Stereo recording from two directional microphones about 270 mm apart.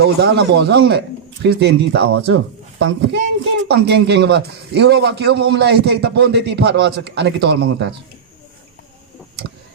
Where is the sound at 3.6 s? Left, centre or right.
Right.